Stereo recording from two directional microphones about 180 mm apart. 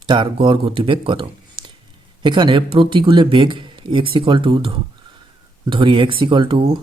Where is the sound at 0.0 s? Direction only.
25° right (ahead or behind).